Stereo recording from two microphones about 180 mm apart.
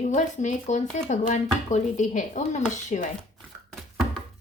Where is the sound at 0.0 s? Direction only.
45° left (ahead or behind).